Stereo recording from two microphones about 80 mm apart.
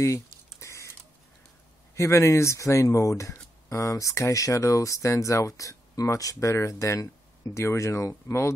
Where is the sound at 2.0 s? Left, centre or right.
Left.